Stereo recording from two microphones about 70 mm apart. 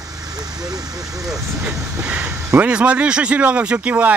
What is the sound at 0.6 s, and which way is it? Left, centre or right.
Speech, right.